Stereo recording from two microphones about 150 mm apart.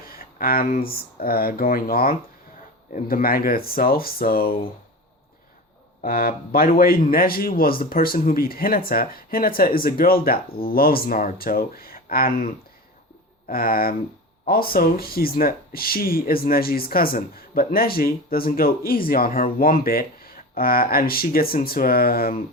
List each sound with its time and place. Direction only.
0.1 s a man's voice: 75° left (ahead or behind)
6.0 s a man's voice: 75° left (ahead or behind)
13.5 s a man's voice: 80° left